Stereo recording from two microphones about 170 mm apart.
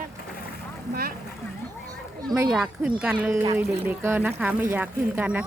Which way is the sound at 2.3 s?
25° right (ahead or behind).